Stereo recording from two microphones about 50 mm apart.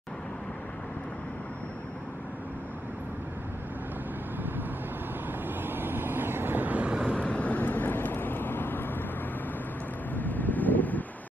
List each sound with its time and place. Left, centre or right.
5.6 s vehicle: right
7.1 s vehicle: left
10.1 s wind: left